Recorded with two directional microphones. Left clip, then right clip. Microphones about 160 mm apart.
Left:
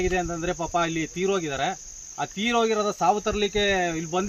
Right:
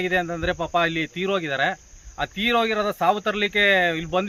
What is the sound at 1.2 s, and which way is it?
Speech, 10° right (ahead or behind).